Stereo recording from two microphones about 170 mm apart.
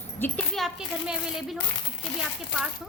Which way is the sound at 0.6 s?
Centre (ahead or behind).